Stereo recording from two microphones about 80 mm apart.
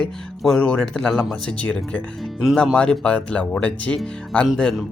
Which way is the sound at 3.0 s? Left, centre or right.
Centre.